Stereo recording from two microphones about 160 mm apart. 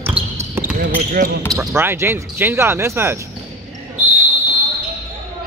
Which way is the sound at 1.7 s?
15° right (ahead or behind).